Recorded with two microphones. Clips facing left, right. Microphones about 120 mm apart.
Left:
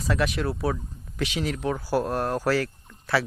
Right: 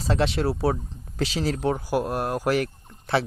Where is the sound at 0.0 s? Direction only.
30° right (ahead or behind).